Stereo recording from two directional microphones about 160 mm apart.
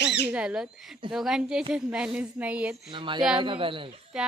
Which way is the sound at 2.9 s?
30° right (ahead or behind).